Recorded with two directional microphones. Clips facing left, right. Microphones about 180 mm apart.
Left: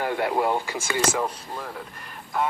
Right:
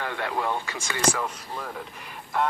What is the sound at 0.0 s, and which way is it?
Speech, 25° left (ahead or behind).